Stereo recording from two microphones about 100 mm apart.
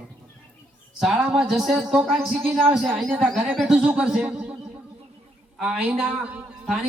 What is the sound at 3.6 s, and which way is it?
Speech, 10° right (ahead or behind).